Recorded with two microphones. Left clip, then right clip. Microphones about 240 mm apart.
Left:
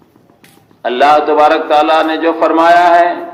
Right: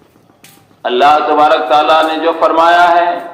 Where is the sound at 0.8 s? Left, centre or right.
Left.